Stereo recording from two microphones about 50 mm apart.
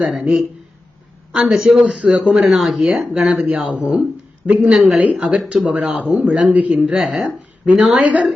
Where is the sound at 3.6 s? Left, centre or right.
Right.